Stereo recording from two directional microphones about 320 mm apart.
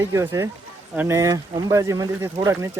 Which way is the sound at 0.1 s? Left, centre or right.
Centre.